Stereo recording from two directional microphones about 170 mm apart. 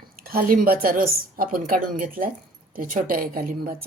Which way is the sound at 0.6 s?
55° right (ahead or behind).